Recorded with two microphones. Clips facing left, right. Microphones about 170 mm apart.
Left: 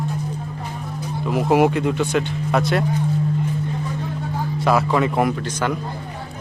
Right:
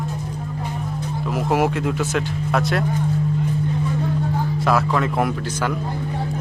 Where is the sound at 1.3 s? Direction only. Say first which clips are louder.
Left 4 dB; centre (ahead or behind).